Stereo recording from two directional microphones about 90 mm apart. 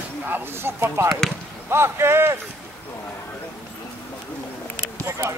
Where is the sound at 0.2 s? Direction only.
20° right (ahead or behind).